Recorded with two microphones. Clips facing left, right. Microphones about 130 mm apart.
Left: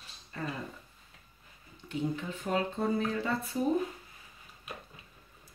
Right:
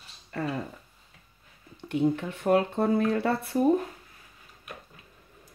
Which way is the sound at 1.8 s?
65° right (ahead or behind).